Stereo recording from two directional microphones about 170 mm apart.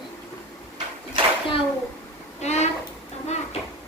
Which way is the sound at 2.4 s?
40° left (ahead or behind).